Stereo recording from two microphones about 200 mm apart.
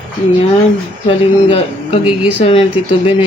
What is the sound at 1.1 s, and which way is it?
Speech, 30° left (ahead or behind).